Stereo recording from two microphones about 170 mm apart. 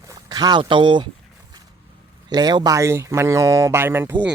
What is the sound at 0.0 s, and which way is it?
Speech, 20° right (ahead or behind).